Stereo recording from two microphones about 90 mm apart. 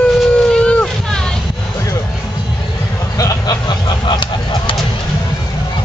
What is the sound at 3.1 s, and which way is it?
Vehicle, 45° left (ahead or behind).